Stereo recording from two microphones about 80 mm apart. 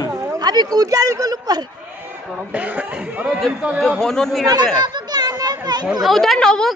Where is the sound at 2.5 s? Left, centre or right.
Centre.